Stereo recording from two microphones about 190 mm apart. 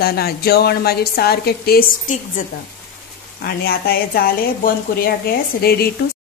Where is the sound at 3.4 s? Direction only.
50° left (ahead or behind).